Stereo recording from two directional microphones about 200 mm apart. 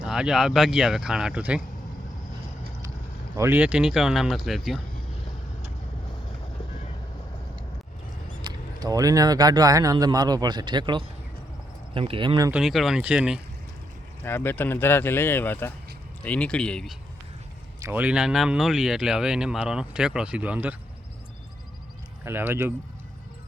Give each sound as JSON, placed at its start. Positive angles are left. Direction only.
{"t": 0.0, "sound": "speech", "side_deg": -5}
{"t": 3.3, "sound": "speech", "side_deg": -10}
{"t": 8.4, "sound": "speech", "side_deg": -20}
{"t": 12.5, "sound": "speech", "side_deg": 0}
{"t": 14.3, "sound": "speech", "side_deg": 10}
{"t": 17.8, "sound": "speech", "side_deg": -10}
{"t": 22.2, "sound": "speech", "side_deg": -10}